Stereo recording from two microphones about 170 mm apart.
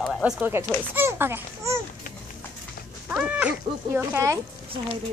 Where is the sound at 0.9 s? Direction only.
15° right (ahead or behind).